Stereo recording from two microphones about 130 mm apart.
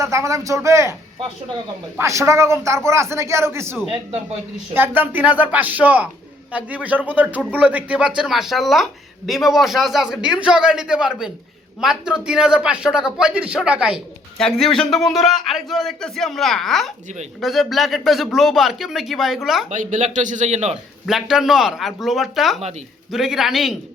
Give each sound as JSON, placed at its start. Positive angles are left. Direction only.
{"t": 0.0, "sound": "speech", "side_deg": -25}
{"t": 2.0, "sound": "a man's voice", "side_deg": -20}
{"t": 14.3, "sound": "speech", "side_deg": 5}
{"t": 19.7, "sound": "a man's voice", "side_deg": -80}
{"t": 21.1, "sound": "speech", "side_deg": 0}